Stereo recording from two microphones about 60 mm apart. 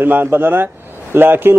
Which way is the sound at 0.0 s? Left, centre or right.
Right.